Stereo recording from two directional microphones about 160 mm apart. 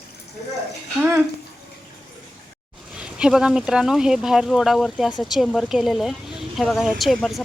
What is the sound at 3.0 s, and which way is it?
Speech, 5° right (ahead or behind).